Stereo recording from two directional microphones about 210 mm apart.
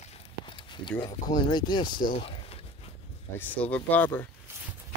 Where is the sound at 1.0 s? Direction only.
20° left (ahead or behind).